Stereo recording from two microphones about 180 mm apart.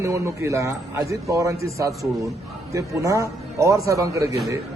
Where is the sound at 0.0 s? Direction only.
15° right (ahead or behind).